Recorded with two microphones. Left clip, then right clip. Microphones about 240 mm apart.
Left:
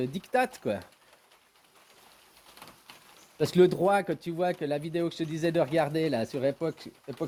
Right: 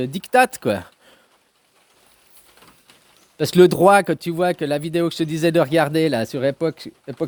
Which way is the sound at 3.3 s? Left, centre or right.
Right.